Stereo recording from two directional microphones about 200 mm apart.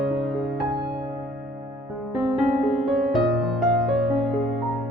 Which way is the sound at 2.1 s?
Centre (ahead or behind).